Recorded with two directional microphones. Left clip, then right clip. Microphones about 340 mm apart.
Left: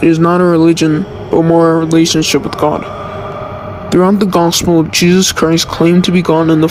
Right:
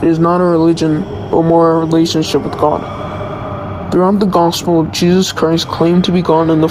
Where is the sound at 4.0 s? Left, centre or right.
Left.